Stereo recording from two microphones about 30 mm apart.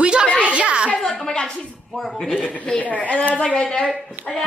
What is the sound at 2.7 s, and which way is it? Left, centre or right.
Speech, left.